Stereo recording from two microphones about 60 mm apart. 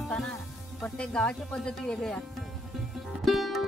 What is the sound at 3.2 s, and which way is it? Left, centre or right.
Music, centre.